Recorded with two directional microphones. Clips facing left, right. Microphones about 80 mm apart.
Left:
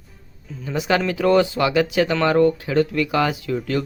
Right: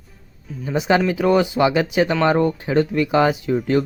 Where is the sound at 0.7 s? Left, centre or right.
Right.